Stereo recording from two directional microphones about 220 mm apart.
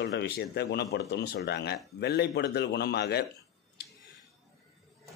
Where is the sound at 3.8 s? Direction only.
50° left (ahead or behind).